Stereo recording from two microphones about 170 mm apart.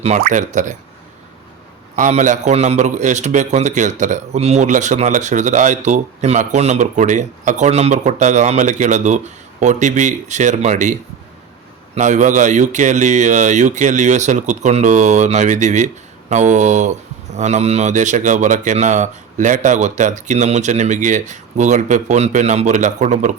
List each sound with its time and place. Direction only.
0.2 s a man's voice: 50° right (ahead or behind)
2.0 s a man's voice: 45° right (ahead or behind)
11.9 s a man's voice: 45° right (ahead or behind)